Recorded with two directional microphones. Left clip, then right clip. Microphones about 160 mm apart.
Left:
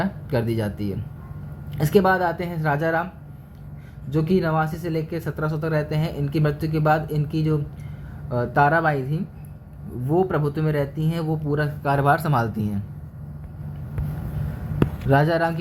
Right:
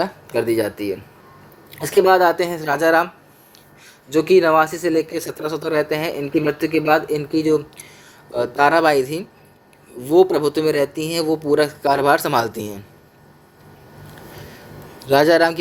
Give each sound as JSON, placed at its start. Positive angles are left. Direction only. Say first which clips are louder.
{"t": 0.0, "sound": "speech", "louder": "right 5 dB", "side_deg": -30}
{"t": 4.1, "sound": "speech", "louder": "right 9 dB", "side_deg": -35}
{"t": 15.1, "sound": "speech", "louder": "right 7 dB", "side_deg": -35}